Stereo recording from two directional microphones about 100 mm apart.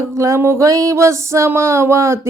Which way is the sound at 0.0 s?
30° right (ahead or behind).